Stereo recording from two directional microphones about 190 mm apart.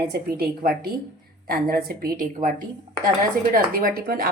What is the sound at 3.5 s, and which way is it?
Speech, 50° right (ahead or behind).